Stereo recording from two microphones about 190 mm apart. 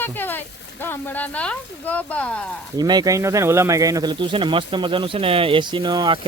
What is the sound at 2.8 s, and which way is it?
Speech, 20° right (ahead or behind).